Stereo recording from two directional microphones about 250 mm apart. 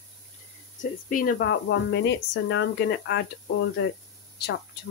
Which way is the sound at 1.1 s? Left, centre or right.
Left.